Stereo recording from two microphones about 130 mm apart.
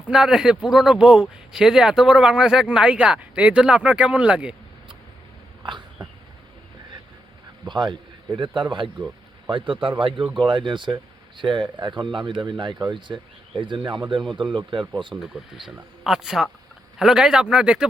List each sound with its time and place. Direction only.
0.1 s speech: 5° right (ahead or behind)
7.7 s a man's voice: 35° right (ahead or behind)
9.5 s speech: 40° right (ahead or behind)
16.0 s speech: 5° right (ahead or behind)